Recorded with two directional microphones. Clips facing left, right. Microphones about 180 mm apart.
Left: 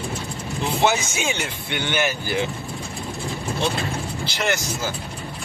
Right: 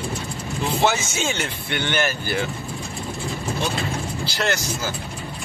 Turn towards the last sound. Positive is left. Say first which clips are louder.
# even
turn(degrees=20)  # may be behind; listen again after turning